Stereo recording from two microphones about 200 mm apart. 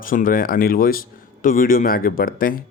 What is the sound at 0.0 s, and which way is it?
Speech, 45° left (ahead or behind).